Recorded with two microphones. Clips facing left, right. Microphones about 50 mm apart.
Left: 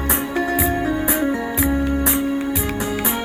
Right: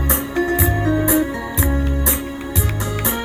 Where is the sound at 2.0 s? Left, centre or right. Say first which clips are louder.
Left 3 dB; left.